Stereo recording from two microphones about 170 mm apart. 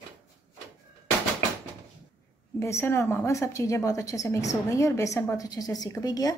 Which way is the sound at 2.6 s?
15° left (ahead or behind).